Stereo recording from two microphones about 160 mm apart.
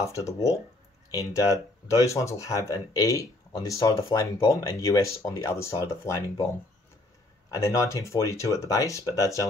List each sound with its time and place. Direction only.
0.0 s speech: 20° left (ahead or behind)
7.5 s speech: 20° left (ahead or behind)